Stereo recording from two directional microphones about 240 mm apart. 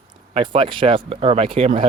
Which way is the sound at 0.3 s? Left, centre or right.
Right.